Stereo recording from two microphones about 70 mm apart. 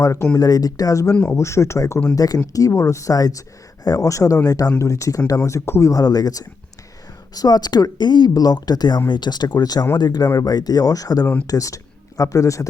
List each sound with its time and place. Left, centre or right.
0.0 s speech: left
0.3 s speech: left
1.2 s speech: left
2.1 s speech: left
2.5 s speech: left
4.8 s speech: left
5.9 s speech: left
8.3 s speech: left
9.0 s speech: left